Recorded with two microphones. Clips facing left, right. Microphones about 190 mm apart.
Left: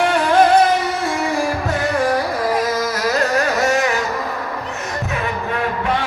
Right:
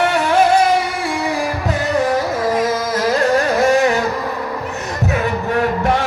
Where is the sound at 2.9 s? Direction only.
30° right (ahead or behind).